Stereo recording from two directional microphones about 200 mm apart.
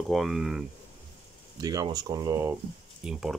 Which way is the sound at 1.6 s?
20° right (ahead or behind).